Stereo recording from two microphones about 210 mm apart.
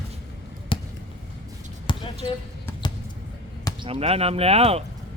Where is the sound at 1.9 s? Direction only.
20° left (ahead or behind).